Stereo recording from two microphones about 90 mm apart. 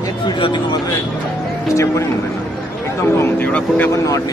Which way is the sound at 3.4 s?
15° left (ahead or behind).